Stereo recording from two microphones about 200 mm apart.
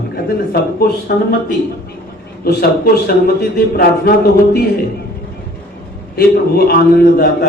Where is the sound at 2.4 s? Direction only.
50° left (ahead or behind).